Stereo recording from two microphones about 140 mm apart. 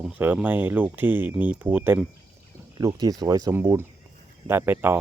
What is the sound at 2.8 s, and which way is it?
Speech, 25° right (ahead or behind).